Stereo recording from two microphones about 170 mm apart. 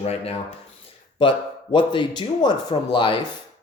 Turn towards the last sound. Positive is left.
turn(degrees=25)  # may be behind; listen again after turning